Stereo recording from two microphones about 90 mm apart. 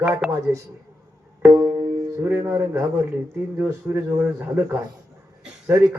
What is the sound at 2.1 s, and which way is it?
Speech, 25° right (ahead or behind).